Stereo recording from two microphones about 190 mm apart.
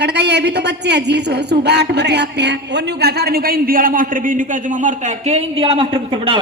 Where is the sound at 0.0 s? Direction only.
65° right (ahead or behind).